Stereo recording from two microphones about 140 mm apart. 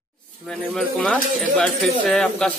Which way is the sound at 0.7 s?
5° left (ahead or behind).